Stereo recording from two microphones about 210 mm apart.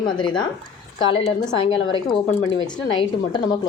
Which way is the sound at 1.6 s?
70° left (ahead or behind).